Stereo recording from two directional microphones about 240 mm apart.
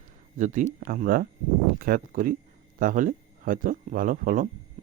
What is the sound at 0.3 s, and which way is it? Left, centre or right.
Speech, right.